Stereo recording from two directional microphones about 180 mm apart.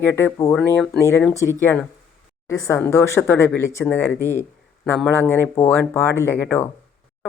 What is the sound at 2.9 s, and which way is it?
Speech, 15° left (ahead or behind).